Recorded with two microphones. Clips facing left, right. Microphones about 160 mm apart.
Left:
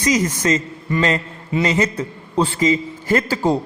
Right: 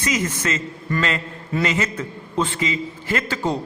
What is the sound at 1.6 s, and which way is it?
A man's voice, 35° left (ahead or behind).